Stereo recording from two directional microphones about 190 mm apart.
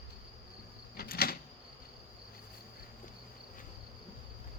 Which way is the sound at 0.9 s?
50° left (ahead or behind).